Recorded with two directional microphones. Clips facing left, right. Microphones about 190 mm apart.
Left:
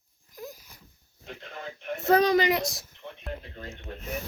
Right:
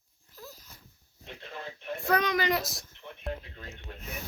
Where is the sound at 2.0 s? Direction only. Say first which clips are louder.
Left 7 dB; 25° left (ahead or behind).